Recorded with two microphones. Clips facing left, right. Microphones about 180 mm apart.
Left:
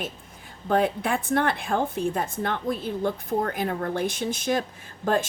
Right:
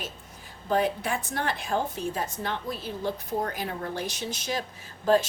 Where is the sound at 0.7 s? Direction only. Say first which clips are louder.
Left 3 dB; 55° left (ahead or behind).